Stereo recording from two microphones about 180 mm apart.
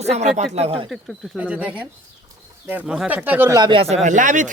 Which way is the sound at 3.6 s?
30° right (ahead or behind).